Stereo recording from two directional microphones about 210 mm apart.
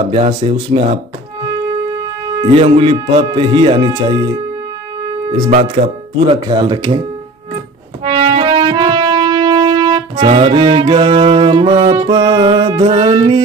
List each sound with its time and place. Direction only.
0.1 s speech: 25° right (ahead or behind)
2.4 s speech: 25° right (ahead or behind)
5.5 s speech: 35° right (ahead or behind)
6.3 s speech: 20° right (ahead or behind)
8.0 s music: 25° right (ahead or behind)
12.0 s speech: 20° right (ahead or behind)